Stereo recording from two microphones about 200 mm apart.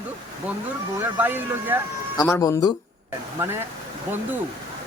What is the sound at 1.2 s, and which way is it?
Speech, 10° right (ahead or behind).